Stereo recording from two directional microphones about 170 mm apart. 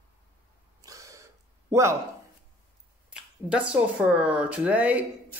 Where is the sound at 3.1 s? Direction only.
5° right (ahead or behind).